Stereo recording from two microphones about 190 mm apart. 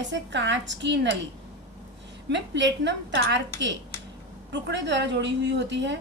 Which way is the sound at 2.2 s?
65° right (ahead or behind).